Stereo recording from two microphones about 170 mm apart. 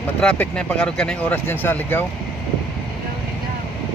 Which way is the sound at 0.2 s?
5° left (ahead or behind).